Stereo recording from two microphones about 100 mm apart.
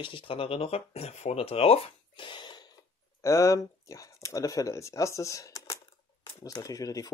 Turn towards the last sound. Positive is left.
turn(degrees=35)  # may be behind; listen again after turning